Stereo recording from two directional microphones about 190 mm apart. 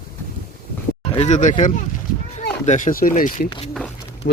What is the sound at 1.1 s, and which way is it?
Speech, 35° left (ahead or behind).